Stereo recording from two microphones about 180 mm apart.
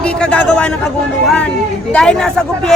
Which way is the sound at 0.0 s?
5° left (ahead or behind).